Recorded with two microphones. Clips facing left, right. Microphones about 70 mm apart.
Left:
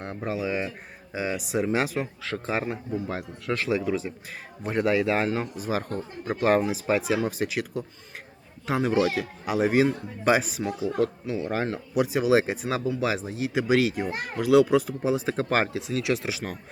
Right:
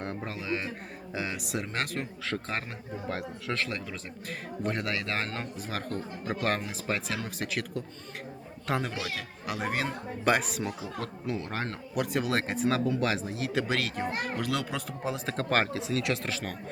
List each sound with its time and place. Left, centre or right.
0.0 s a man's voice: centre
8.9 s a man's voice: centre
9.1 s a man's voice: centre